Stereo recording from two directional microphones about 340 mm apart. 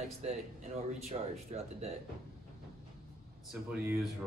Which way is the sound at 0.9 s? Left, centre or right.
Centre.